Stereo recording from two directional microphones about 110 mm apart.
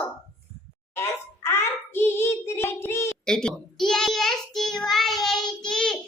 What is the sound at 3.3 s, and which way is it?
Child singing, 5° left (ahead or behind).